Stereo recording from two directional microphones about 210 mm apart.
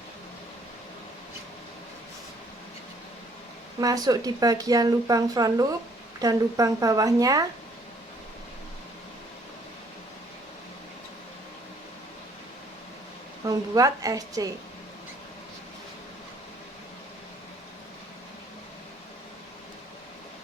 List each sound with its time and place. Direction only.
3.8 s speech: 15° right (ahead or behind)
13.4 s speech: 15° right (ahead or behind)